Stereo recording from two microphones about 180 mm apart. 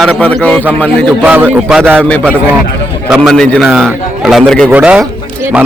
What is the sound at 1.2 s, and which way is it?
Speech, 10° right (ahead or behind).